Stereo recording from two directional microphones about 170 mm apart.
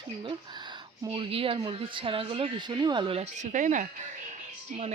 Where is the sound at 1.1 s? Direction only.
35° right (ahead or behind).